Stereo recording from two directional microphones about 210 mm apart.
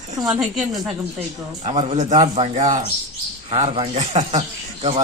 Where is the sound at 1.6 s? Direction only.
30° right (ahead or behind).